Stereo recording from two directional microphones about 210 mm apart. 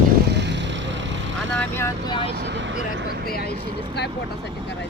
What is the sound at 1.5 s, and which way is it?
Speech, 10° left (ahead or behind).